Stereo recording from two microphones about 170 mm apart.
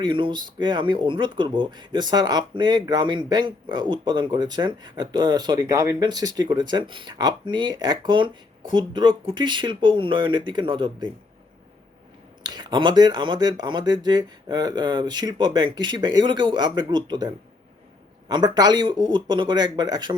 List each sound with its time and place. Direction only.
0.0 s speech: 30° right (ahead or behind)
12.4 s speech: 25° right (ahead or behind)